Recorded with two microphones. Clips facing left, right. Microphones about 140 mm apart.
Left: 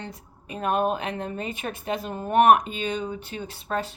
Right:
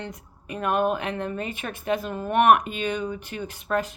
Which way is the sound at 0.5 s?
35° left (ahead or behind).